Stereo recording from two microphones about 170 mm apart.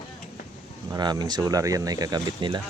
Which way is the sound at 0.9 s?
20° right (ahead or behind).